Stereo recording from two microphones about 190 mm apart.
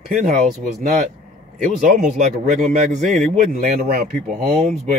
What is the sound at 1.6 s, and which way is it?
Speech, 45° right (ahead or behind).